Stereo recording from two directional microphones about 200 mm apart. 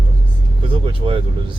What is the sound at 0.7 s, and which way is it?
Speech, 25° right (ahead or behind).